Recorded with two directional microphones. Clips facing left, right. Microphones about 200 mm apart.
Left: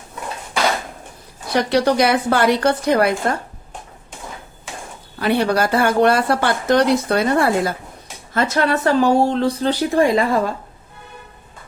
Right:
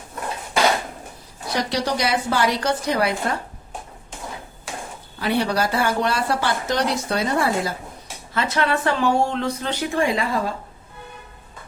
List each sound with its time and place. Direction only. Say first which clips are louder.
1.5 s a woman's voice: left 7 dB; 60° left (ahead or behind)
5.2 s a woman's voice: left 4 dB; 55° left (ahead or behind)
8.3 s speech: left 4 dB; 45° left (ahead or behind)